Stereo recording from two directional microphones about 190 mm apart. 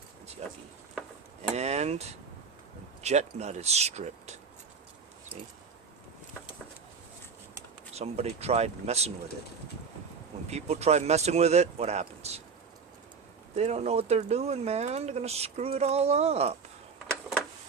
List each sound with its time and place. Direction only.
0.4 s speech: 35° right (ahead or behind)
7.9 s speech: 35° right (ahead or behind)
10.4 s speech: 35° right (ahead or behind)
13.6 s speech: 35° right (ahead or behind)